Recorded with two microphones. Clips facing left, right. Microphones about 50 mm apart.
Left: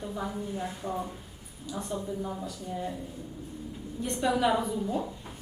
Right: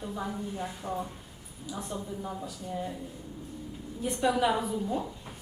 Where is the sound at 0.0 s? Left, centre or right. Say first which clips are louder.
Left 1 dB; centre.